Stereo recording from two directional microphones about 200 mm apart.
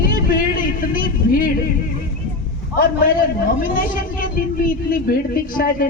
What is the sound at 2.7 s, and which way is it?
A man's voice, 45° left (ahead or behind).